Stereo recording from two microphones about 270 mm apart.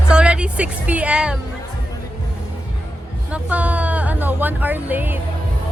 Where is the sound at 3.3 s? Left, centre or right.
Centre.